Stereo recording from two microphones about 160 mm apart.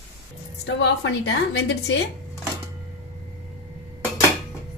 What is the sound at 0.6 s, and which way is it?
Speech, 90° left.